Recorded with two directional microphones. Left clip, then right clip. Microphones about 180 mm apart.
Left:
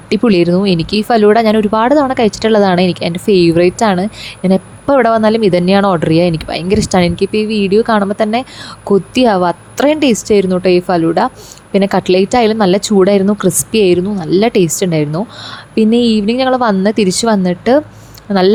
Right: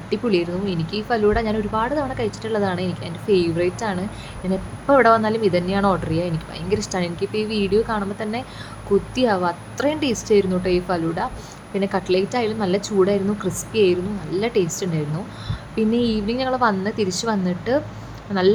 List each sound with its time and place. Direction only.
0.1 s speech: 50° left (ahead or behind)